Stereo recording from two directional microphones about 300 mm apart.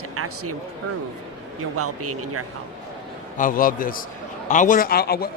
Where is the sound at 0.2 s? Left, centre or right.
Right.